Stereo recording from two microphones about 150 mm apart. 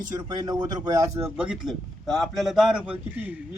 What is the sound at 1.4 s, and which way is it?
A man's voice, 5° right (ahead or behind).